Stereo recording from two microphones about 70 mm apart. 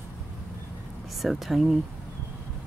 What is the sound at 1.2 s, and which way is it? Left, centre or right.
Speech, centre.